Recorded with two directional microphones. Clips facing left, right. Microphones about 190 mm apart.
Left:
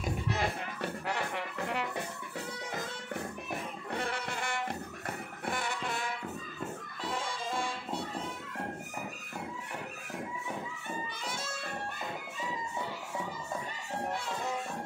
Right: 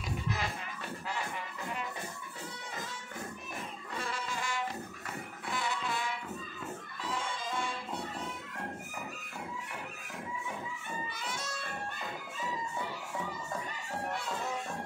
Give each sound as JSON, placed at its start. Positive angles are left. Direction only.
{"t": 0.0, "sound": "music", "side_deg": 60}
{"t": 3.9, "sound": "music", "side_deg": 60}
{"t": 5.4, "sound": "music", "side_deg": 50}